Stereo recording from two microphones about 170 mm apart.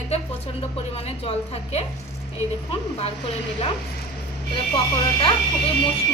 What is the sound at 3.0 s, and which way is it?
Speech, 35° left (ahead or behind).